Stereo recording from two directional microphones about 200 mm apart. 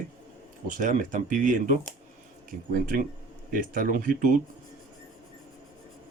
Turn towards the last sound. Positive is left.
turn(degrees=-45)  # may be behind; listen again after turning